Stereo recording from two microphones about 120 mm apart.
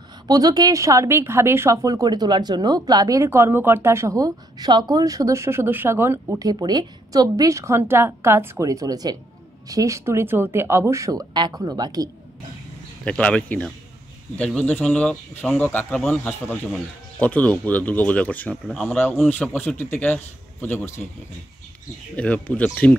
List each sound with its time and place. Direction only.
0.3 s a woman's voice: 30° right (ahead or behind)
13.0 s speech: 10° left (ahead or behind)
22.1 s speech: 10° left (ahead or behind)